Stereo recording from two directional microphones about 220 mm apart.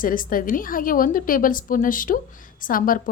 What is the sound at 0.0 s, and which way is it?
A woman's voice, 40° left (ahead or behind).